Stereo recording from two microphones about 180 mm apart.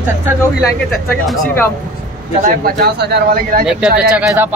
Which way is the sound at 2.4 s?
55° right (ahead or behind).